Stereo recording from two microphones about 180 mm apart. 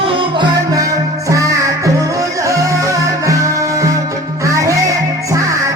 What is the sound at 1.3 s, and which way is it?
Music, 20° right (ahead or behind).